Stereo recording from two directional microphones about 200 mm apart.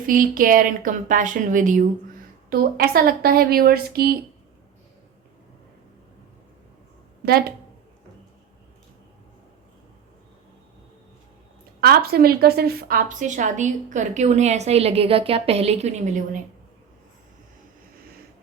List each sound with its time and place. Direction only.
0.0 s a woman's voice: 45° right (ahead or behind)
7.2 s a woman's voice: 50° right (ahead or behind)
11.8 s a woman's voice: 50° right (ahead or behind)